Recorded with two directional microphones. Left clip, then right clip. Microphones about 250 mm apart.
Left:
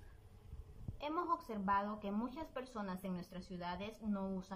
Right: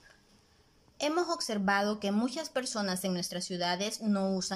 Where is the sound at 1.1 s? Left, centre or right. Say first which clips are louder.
Right 5 dB; right.